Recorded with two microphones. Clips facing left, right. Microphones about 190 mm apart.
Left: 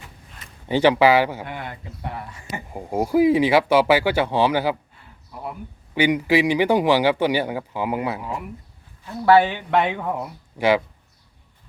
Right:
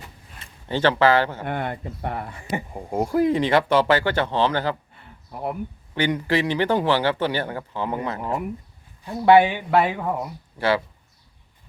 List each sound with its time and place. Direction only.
0.7 s speech: 15° left (ahead or behind)
1.5 s speech: 55° right (ahead or behind)
2.7 s speech: 5° left (ahead or behind)
5.9 s speech: 10° left (ahead or behind)
9.0 s speech: 15° right (ahead or behind); by 10.3 s centre (ahead or behind)
10.6 s speech: 15° left (ahead or behind)